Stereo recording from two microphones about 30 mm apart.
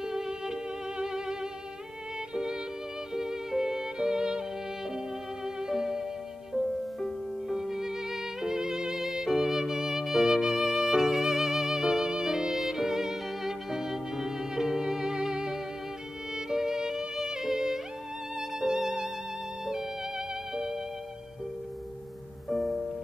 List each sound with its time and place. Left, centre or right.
0.0 s music: centre
0.3 s violin: centre
4.9 s music: centre
7.4 s music: centre
22.5 s music: centre